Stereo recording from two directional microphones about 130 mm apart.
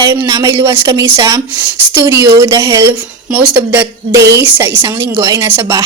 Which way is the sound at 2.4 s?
20° right (ahead or behind).